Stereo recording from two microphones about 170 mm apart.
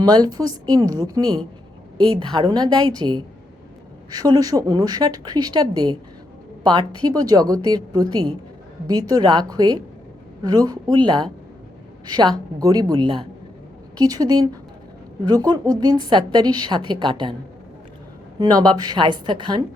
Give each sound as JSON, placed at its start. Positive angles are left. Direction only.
{"t": 0.0, "sound": "a woman's voice", "side_deg": -25}
{"t": 18.3, "sound": "a woman's voice", "side_deg": -25}